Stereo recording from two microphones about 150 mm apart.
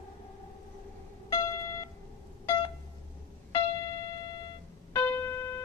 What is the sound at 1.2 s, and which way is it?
Music, 20° left (ahead or behind).